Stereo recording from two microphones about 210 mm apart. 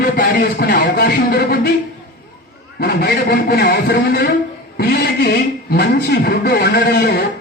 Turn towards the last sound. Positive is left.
turn(degrees=45)  # may be behind; listen again after turning